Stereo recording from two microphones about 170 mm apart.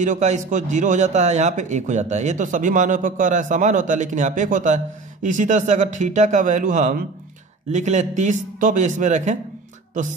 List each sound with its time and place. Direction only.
0.0 s a man's voice: 45° right (ahead or behind)